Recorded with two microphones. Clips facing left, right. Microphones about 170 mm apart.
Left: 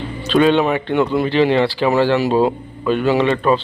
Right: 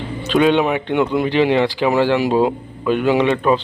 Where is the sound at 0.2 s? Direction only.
15° right (ahead or behind).